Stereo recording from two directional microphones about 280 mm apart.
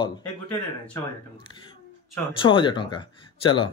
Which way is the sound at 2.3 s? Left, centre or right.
Centre.